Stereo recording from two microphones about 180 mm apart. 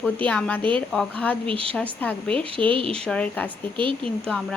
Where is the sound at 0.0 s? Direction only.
5° left (ahead or behind).